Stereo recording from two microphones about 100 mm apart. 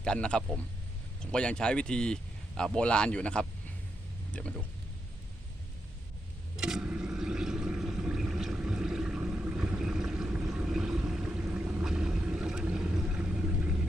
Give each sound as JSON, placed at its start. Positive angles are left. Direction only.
{"t": 0.0, "sound": "speech", "side_deg": 10}
{"t": 6.6, "sound": "a sound", "side_deg": -5}
{"t": 10.4, "sound": "vehicle", "side_deg": -5}
{"t": 11.4, "sound": "boat", "side_deg": -20}
{"t": 11.9, "sound": "vehicle", "side_deg": -5}